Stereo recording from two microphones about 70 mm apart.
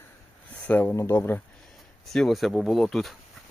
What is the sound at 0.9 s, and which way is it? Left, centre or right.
Speech, left.